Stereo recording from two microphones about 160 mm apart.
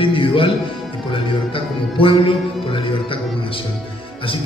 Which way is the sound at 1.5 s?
35° left (ahead or behind).